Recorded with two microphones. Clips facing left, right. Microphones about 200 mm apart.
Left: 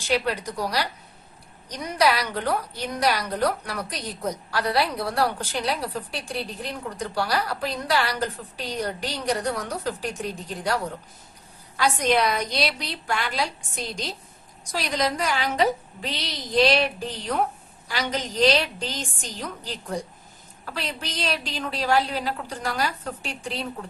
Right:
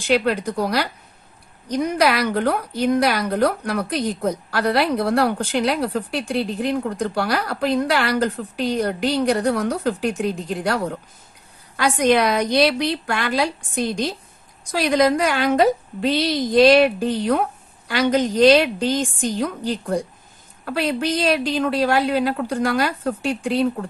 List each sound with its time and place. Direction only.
0.1 s a woman's voice: 55° right (ahead or behind)
11.7 s a woman's voice: 55° right (ahead or behind)